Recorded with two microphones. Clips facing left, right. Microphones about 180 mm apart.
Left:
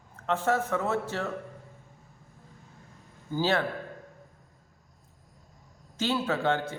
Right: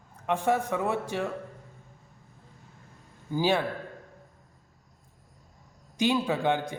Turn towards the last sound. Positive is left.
turn(degrees=-15)  # may be behind; listen again after turning